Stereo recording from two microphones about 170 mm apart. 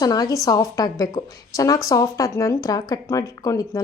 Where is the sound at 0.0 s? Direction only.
20° left (ahead or behind).